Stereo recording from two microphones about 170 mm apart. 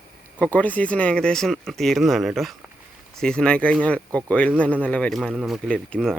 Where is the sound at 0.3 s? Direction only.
10° left (ahead or behind).